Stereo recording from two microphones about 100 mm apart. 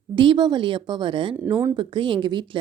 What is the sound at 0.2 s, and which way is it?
Speech, 50° right (ahead or behind).